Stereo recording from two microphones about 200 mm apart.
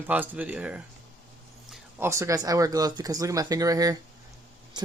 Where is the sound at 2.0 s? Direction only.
15° right (ahead or behind).